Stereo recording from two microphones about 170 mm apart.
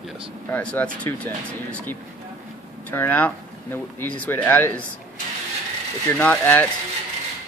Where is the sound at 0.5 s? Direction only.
10° left (ahead or behind).